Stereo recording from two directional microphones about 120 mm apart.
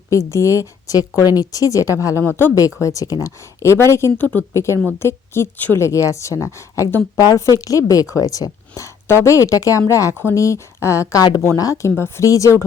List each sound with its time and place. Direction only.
0.1 s a woman's voice: 25° left (ahead or behind)